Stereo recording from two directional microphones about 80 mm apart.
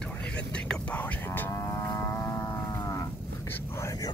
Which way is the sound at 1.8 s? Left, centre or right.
Left.